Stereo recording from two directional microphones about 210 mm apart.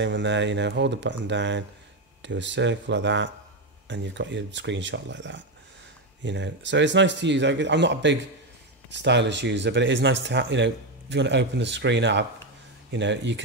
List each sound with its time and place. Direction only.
0.0 s speech: 60° right (ahead or behind)